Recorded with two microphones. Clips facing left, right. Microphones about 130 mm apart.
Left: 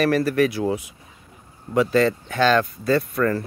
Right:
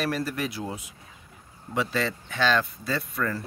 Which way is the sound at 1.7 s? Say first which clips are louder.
Left 9 dB; 50° left (ahead or behind).